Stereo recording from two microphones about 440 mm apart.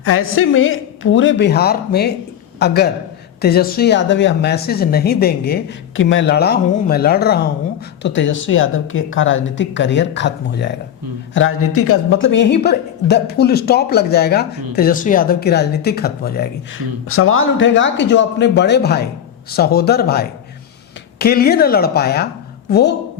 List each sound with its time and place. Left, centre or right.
0.0 s speech: left